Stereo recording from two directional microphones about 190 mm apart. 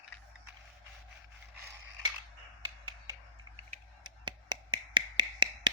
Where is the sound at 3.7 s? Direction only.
25° right (ahead or behind).